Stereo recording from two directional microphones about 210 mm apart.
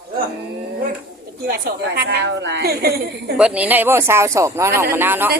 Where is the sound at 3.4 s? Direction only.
5° right (ahead or behind).